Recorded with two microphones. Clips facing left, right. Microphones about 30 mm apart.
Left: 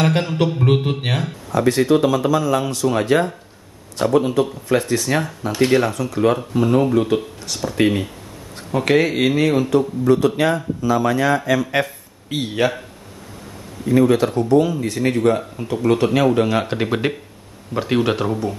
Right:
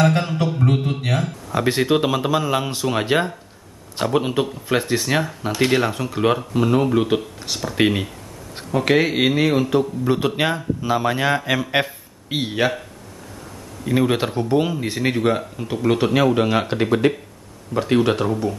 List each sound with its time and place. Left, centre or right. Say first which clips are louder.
0.8 s a man's voice: left 1 dB; left
1.5 s speech: left 3 dB; right
8.7 s speech: left 1 dB; centre; by 11.6 s right
11.7 s a sound: even; right
12.4 s speech: left 2 dB; centre
13.8 s speech: left 4 dB; right; by 18.5 s centre